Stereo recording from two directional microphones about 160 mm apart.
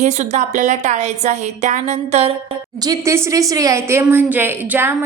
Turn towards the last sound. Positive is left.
turn(degrees=-15)  # may be behind; listen again after turning